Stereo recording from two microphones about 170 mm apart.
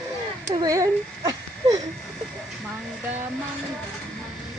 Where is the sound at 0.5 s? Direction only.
20° right (ahead or behind).